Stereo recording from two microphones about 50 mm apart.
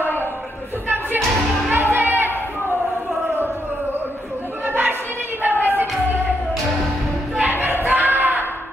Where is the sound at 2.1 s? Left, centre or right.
Right.